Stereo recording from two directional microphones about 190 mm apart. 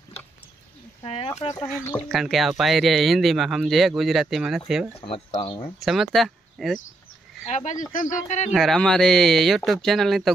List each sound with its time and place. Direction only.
1.0 s speech: 30° left (ahead or behind)
1.5 s speech: 15° left (ahead or behind)
2.0 s speech: centre (ahead or behind)
5.0 s speech: 30° left (ahead or behind)
5.8 s speech: centre (ahead or behind)
7.4 s speech: 40° left (ahead or behind)
8.5 s speech: centre (ahead or behind)